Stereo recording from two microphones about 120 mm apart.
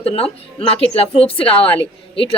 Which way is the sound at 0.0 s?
55° left (ahead or behind).